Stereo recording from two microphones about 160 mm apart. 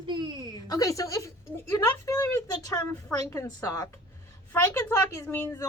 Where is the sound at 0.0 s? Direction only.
30° right (ahead or behind).